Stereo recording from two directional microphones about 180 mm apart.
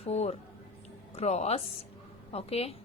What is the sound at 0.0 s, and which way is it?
A woman's voice, 35° left (ahead or behind).